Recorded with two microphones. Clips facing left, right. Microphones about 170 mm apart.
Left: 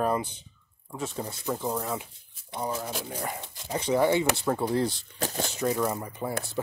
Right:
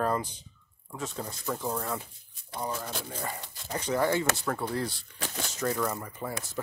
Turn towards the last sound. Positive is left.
turn(degrees=20)  # may be behind; listen again after turning